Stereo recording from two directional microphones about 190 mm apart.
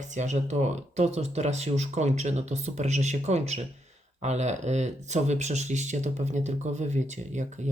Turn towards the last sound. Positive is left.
turn(degrees=-40)  # may be behind; listen again after turning